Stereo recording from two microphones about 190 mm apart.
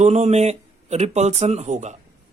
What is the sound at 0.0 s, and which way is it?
A man's voice, 35° right (ahead or behind).